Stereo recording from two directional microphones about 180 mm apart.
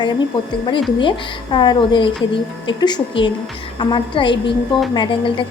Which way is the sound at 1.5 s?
25° left (ahead or behind).